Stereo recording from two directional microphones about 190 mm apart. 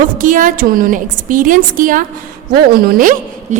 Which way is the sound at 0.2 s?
45° right (ahead or behind).